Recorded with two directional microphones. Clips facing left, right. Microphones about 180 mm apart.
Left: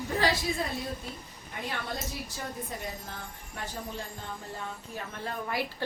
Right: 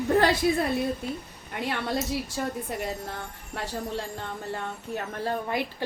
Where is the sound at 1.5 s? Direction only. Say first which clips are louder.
Right 7 dB; 70° right (ahead or behind).